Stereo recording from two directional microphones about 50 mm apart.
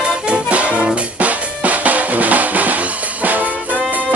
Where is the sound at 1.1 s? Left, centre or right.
Right.